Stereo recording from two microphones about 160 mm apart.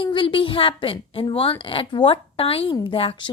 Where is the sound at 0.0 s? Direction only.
30° left (ahead or behind).